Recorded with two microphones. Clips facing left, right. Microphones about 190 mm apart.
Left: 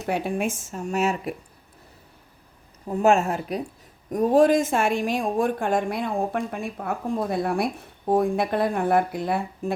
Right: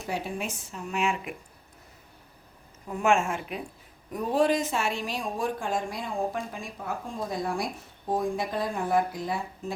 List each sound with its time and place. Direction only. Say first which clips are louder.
0.1 s speech: left 7 dB; 55° left (ahead or behind); by 1.4 s 40° left (ahead or behind)
2.8 s speech: left 5 dB; 35° left (ahead or behind); by 9.7 s 60° left (ahead or behind)